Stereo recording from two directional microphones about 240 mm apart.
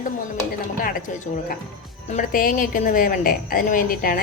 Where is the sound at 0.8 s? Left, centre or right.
Left.